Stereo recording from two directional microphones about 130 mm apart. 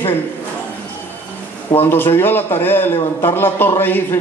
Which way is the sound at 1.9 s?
15° left (ahead or behind).